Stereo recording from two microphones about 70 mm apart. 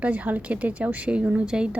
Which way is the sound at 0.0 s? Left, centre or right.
Right.